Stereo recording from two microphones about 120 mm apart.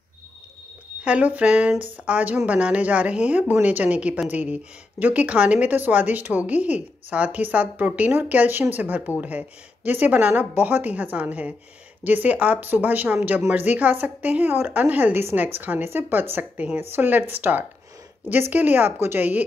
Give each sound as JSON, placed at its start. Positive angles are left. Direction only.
{"t": 1.0, "sound": "a woman's voice", "side_deg": -10}